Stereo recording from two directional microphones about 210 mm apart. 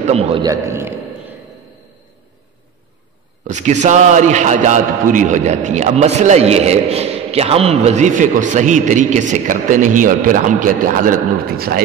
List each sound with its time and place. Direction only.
0.0 s a man's voice: 30° right (ahead or behind); by 0.9 s 10° right (ahead or behind)
3.4 s a man's voice: 35° right (ahead or behind)